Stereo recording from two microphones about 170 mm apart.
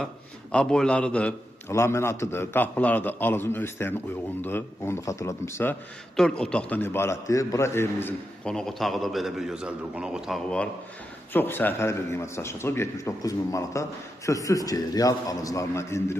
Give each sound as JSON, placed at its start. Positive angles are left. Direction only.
{"t": 0.5, "sound": "a man's voice", "side_deg": 5}
{"t": 6.1, "sound": "a man's voice", "side_deg": 5}